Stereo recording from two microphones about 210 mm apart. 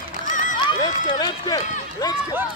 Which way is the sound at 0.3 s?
40° left (ahead or behind).